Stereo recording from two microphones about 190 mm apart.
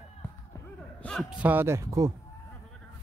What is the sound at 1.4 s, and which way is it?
Speech, 10° right (ahead or behind).